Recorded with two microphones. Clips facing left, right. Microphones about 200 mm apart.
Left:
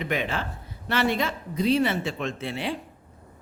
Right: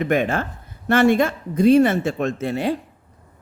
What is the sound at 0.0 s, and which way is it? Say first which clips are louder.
Speech: right 8 dB; 50° right (ahead or behind).